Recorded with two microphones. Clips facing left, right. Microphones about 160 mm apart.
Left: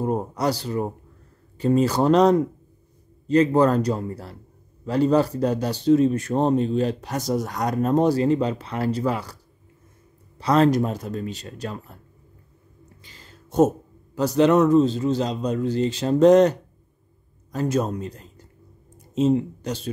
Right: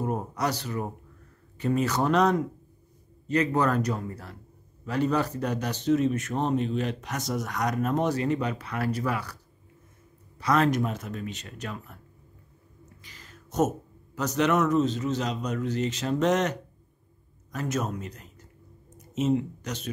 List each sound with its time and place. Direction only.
0.0 s speech: 30° left (ahead or behind)
13.0 s speech: 30° left (ahead or behind)